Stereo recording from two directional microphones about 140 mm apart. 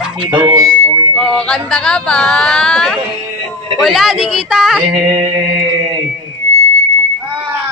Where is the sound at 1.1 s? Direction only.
5° left (ahead or behind).